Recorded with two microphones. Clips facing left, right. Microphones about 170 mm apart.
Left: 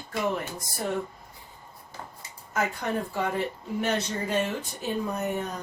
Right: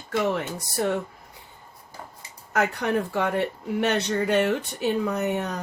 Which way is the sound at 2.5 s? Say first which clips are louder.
Right 5 dB; 70° right (ahead or behind).